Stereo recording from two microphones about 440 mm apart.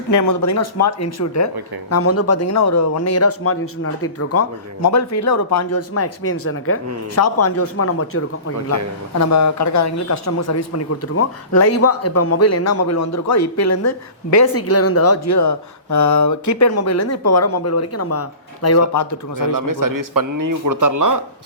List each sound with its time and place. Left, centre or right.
0.1 s speech: left
19.4 s a man's voice: right